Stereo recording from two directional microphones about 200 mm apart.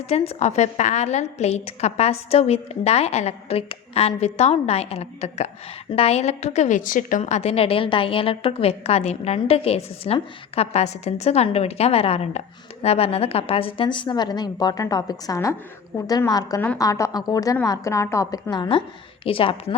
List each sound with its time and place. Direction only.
0.0 s a woman's voice: 35° left (ahead or behind)